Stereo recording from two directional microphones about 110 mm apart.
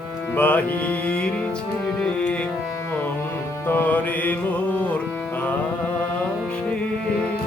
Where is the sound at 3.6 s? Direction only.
15° left (ahead or behind).